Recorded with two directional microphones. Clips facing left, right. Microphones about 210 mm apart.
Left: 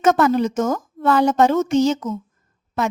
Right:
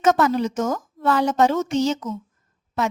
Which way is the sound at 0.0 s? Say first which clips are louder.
Left 3 dB; 55° left (ahead or behind).